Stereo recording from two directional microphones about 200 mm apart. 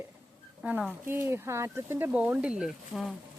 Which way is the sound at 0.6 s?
5° right (ahead or behind).